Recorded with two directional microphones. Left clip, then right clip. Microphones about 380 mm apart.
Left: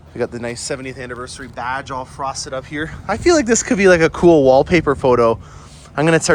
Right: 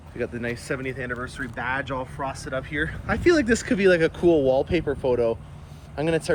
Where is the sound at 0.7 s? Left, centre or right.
Centre.